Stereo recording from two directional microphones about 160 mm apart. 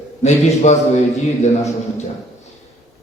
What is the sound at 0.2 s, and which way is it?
A man's voice, 45° left (ahead or behind).